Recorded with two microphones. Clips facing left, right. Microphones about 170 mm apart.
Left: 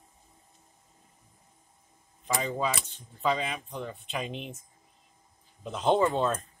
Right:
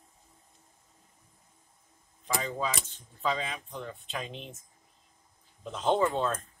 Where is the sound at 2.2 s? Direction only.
10° left (ahead or behind).